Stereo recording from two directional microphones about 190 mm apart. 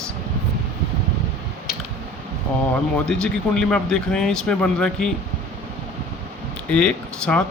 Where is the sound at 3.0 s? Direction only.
5° left (ahead or behind).